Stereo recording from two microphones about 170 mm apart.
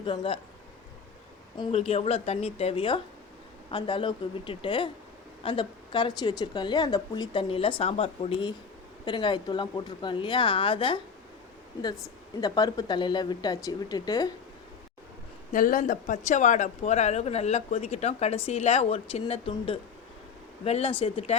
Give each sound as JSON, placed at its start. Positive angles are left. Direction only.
{"t": 0.0, "sound": "speech", "side_deg": 30}
{"t": 1.5, "sound": "a woman's voice", "side_deg": 35}
{"t": 12.4, "sound": "speech", "side_deg": 25}
{"t": 15.5, "sound": "speech", "side_deg": 50}